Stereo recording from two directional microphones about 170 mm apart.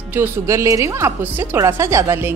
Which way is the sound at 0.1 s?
15° right (ahead or behind).